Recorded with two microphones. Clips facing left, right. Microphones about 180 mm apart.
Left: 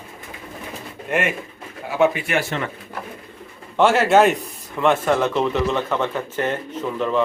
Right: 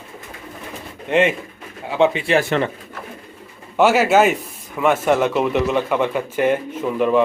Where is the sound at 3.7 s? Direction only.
5° right (ahead or behind).